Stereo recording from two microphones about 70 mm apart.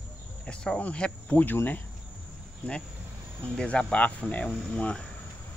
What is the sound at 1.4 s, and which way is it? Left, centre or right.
Speech, left.